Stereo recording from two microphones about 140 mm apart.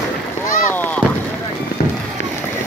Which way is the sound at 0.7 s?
15° left (ahead or behind).